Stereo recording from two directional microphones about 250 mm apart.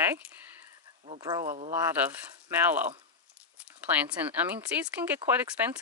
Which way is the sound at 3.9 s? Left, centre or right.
Centre.